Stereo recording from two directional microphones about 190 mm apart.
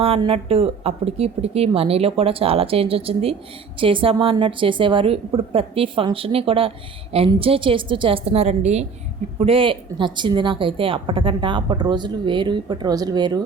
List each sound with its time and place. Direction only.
0.0 s a woman's voice: 30° right (ahead or behind)